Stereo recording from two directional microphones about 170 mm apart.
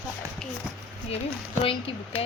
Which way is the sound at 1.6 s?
35° left (ahead or behind).